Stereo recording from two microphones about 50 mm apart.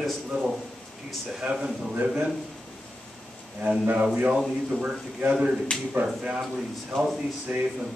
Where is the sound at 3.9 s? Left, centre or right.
Right.